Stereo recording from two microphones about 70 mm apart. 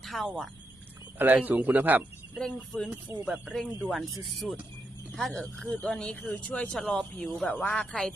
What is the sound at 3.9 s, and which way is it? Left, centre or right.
A woman's voice, centre.